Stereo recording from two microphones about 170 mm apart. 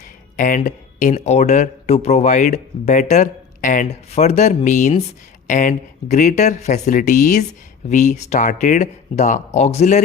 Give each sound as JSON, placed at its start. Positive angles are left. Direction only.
{"t": 0.3, "sound": "speech", "side_deg": 50}